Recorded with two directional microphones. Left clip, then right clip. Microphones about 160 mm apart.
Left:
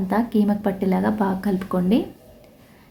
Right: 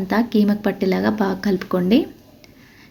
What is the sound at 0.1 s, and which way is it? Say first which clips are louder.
A woman's voice: right 3 dB; 15° right (ahead or behind).